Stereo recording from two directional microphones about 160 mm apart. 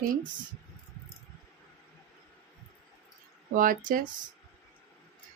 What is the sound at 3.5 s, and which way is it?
Speech, 55° right (ahead or behind).